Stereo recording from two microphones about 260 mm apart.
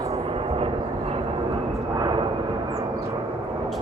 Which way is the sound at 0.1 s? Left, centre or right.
Right.